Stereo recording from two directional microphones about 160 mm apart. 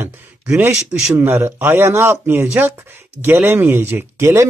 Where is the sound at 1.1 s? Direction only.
15° right (ahead or behind).